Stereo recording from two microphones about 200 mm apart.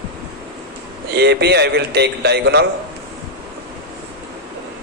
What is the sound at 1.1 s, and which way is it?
A man's voice, 55° right (ahead or behind).